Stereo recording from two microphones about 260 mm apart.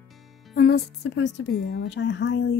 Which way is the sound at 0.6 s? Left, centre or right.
Left.